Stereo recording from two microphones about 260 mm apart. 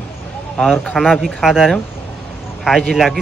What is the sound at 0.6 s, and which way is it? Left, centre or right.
Speech, centre.